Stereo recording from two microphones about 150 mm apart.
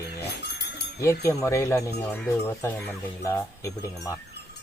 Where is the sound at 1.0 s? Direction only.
20° left (ahead or behind).